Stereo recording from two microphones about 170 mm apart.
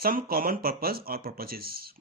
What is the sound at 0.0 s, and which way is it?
Speech, 60° right (ahead or behind).